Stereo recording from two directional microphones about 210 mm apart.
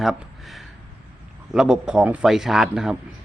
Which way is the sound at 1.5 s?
5° right (ahead or behind).